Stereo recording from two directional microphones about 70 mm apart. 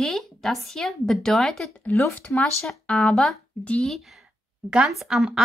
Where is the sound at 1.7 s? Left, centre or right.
Left; by 3.4 s centre.